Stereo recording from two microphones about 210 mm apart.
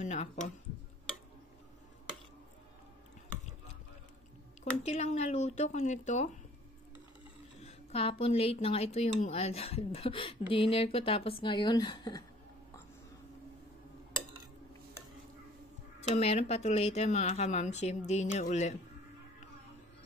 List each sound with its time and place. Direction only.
0.0 s speech: 35° left (ahead or behind)
4.8 s speech: 30° left (ahead or behind)
7.5 s speech: 30° left (ahead or behind)
16.1 s speech: 30° left (ahead or behind)